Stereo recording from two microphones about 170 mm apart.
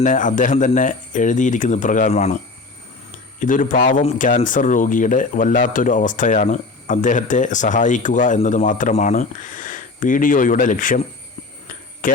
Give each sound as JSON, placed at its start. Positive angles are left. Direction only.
{"t": 0.0, "sound": "speech", "side_deg": 50}
{"t": 3.4, "sound": "speech", "side_deg": 50}
{"t": 12.0, "sound": "speech", "side_deg": 55}